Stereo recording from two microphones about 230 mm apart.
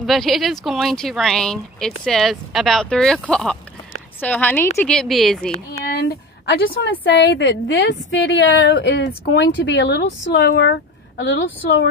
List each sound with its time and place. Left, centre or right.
0.0 s a woman's voice: centre
5.7 s a sound: left
7.1 s a woman's voice: left